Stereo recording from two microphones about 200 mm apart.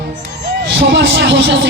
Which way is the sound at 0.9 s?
65° right (ahead or behind).